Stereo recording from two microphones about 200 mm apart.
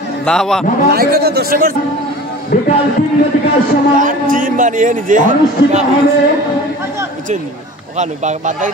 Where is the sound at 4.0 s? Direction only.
40° right (ahead or behind).